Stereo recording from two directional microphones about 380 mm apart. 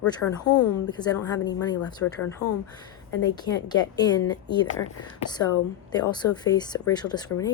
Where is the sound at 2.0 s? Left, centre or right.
Left.